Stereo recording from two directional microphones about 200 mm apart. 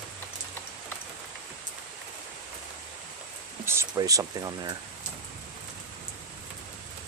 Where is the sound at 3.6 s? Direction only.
15° right (ahead or behind).